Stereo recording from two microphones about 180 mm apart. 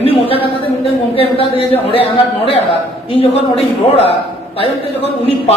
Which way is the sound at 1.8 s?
30° left (ahead or behind).